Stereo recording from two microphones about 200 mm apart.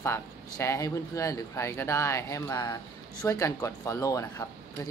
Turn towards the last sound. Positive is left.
turn(degrees=15)  # may be behind; listen again after turning